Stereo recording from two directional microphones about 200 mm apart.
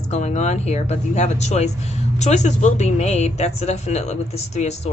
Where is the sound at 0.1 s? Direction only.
35° left (ahead or behind).